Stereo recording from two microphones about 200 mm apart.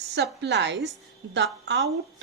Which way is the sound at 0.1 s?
55° right (ahead or behind).